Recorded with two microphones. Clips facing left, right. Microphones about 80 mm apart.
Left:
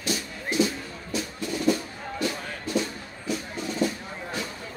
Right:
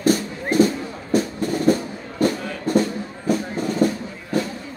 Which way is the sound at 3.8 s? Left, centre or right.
Right.